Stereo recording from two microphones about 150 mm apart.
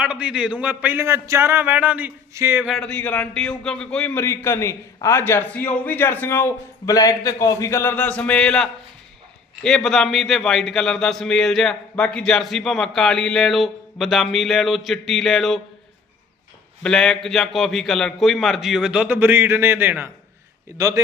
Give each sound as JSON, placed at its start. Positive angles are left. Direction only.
{"t": 0.0, "sound": "speech", "side_deg": -5}
{"t": 2.6, "sound": "a man's voice", "side_deg": 5}
{"t": 16.8, "sound": "a man's voice", "side_deg": 5}